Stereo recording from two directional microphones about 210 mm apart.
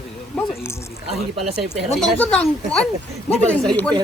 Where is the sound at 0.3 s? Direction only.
Centre (ahead or behind).